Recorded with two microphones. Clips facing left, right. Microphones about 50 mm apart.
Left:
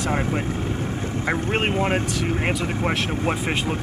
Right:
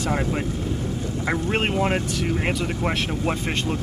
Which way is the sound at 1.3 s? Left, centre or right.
Centre.